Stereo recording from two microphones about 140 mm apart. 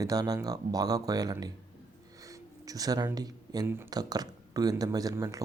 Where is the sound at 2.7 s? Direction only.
25° right (ahead or behind).